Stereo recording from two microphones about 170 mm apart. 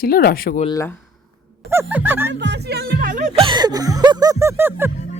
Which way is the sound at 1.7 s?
10° right (ahead or behind).